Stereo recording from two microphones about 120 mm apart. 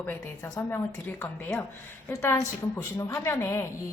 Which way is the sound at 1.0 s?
15° left (ahead or behind).